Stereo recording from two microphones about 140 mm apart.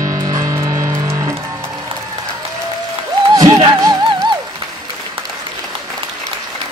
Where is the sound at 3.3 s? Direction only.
25° right (ahead or behind).